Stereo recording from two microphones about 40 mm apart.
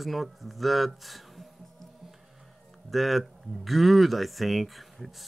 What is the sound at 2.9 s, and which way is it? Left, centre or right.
Speech, centre.